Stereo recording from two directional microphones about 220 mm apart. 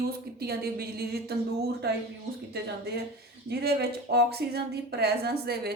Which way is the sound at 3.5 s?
45° right (ahead or behind).